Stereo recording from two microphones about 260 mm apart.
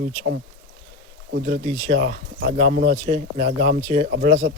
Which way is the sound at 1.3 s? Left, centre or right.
Right.